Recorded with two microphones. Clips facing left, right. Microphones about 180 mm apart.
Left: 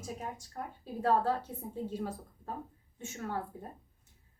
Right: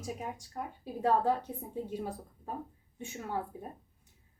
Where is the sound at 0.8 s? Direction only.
15° right (ahead or behind).